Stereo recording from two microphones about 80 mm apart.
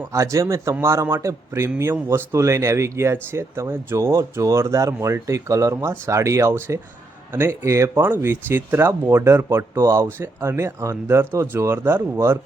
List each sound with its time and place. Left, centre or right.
0.1 s speech: right
11.2 s speech: right